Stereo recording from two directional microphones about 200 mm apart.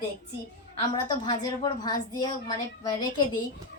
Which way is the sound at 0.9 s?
20° left (ahead or behind).